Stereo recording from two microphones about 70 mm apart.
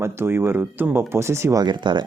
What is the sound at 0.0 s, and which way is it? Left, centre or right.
Speech, right.